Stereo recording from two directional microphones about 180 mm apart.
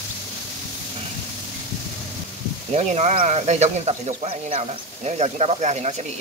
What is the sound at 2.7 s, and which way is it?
Speech, 35° right (ahead or behind).